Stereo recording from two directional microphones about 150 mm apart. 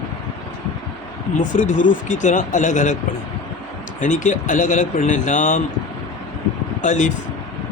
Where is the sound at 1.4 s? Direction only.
60° left (ahead or behind).